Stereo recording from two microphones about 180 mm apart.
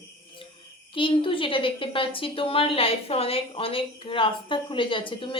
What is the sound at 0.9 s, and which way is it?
A woman's voice, 30° left (ahead or behind).